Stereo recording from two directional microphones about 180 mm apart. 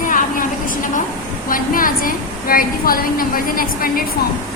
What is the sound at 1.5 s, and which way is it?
A woman's voice, 50° left (ahead or behind).